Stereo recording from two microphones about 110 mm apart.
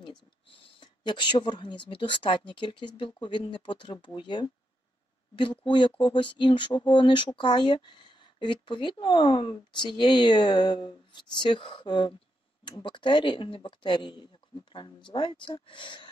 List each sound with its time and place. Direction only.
0.0 s speech: 50° left (ahead or behind)